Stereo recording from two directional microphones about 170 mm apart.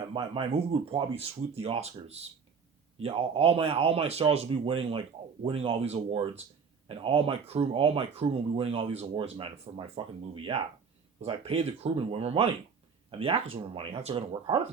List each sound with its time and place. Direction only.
0.1 s speech: 35° right (ahead or behind)